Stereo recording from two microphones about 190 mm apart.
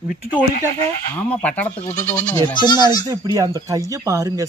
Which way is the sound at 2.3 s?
25° left (ahead or behind).